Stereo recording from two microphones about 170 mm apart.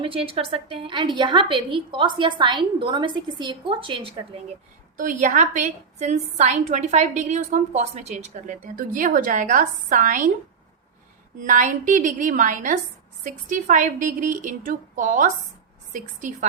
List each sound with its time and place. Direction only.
0.0 s a woman's voice: 35° right (ahead or behind)
4.9 s a woman's voice: 50° right (ahead or behind)
11.3 s a woman's voice: 50° right (ahead or behind)